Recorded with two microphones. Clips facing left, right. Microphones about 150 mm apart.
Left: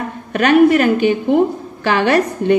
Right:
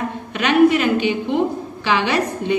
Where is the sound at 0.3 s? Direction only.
50° left (ahead or behind).